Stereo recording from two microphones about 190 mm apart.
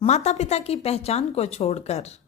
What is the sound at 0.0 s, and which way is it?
Speech, 35° left (ahead or behind).